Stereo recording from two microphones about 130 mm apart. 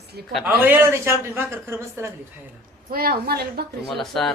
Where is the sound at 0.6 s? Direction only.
15° right (ahead or behind).